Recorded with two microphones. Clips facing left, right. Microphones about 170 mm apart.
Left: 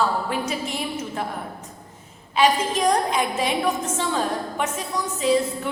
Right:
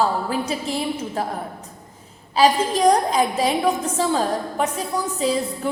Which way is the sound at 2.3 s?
35° right (ahead or behind).